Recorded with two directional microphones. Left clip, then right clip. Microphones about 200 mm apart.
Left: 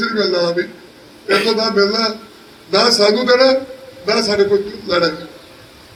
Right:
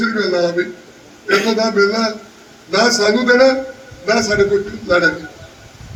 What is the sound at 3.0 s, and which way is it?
A man's voice, 50° left (ahead or behind).